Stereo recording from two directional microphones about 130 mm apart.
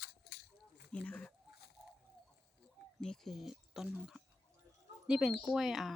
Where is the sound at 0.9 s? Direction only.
10° left (ahead or behind).